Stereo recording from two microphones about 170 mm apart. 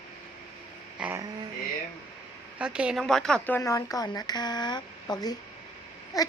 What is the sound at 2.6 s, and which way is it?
Speech, 5° right (ahead or behind).